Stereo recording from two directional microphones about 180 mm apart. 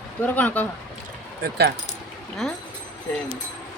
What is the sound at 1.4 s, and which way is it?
Speech, 60° right (ahead or behind).